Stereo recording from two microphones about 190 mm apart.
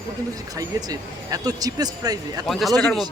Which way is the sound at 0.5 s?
20° right (ahead or behind).